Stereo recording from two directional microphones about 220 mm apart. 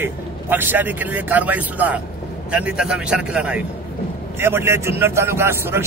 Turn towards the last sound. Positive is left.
turn(degrees=-10)  # may be behind; listen again after turning